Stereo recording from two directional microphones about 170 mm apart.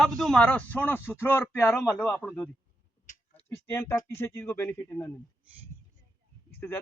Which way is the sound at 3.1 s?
50° left (ahead or behind).